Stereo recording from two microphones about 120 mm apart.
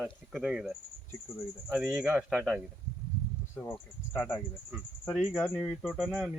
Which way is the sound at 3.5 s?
15° left (ahead or behind).